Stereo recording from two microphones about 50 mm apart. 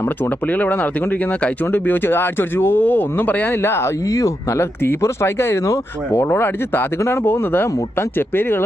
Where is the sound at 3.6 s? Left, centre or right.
Left.